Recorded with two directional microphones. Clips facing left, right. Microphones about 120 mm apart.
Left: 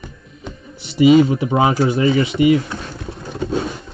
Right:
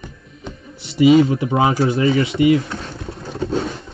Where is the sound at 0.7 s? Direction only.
25° left (ahead or behind).